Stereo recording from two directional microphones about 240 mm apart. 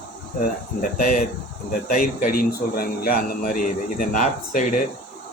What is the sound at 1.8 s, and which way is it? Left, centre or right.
Speech, left.